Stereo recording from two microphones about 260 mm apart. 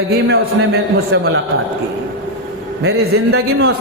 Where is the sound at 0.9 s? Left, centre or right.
Right.